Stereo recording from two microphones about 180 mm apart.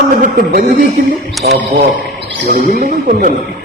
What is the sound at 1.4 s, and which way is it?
Speech, 65° right (ahead or behind).